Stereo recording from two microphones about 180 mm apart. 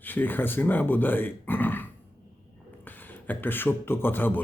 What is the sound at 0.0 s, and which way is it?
A man's voice, 10° left (ahead or behind).